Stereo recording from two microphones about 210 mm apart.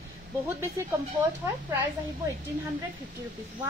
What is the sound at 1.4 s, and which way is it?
Speech, 10° right (ahead or behind).